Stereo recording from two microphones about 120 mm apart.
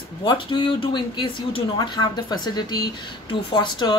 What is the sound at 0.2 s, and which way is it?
Speech, 45° left (ahead or behind).